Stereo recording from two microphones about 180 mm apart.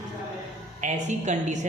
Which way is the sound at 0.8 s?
40° right (ahead or behind).